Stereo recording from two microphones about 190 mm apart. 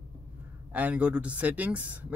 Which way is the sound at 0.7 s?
10° right (ahead or behind).